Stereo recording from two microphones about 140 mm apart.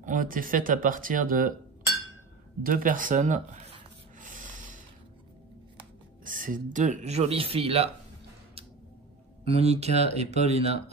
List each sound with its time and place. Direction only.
0.0 s speech: 70° right (ahead or behind)
2.6 s speech: 75° right (ahead or behind); by 3.7 s 60° right (ahead or behind)
4.2 s snort: 65° right (ahead or behind)
6.2 s speech: 75° right (ahead or behind); by 7.9 s 45° right (ahead or behind)
9.4 s speech: 45° right (ahead or behind)